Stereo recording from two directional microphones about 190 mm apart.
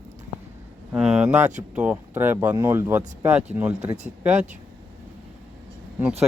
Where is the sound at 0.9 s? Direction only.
5° right (ahead or behind).